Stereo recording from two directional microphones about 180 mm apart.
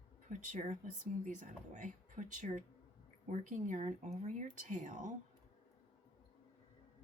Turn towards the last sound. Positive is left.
turn(degrees=-45)  # may be behind; listen again after turning